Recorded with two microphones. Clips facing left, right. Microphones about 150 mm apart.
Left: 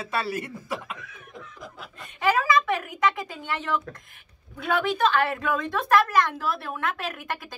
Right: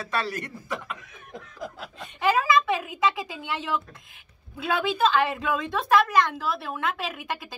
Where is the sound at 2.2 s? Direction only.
Centre (ahead or behind).